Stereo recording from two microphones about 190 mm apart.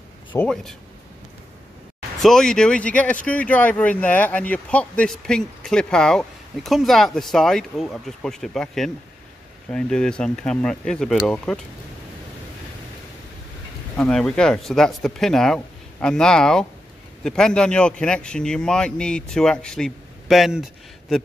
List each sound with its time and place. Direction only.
0.4 s speech: 5° left (ahead or behind)
2.1 s speech: centre (ahead or behind)
13.9 s speech: 5° left (ahead or behind)